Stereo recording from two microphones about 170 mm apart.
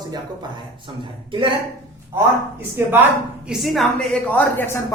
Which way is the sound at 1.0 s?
30° right (ahead or behind).